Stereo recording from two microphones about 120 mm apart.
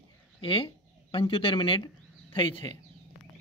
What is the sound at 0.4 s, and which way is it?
Speech, 45° left (ahead or behind).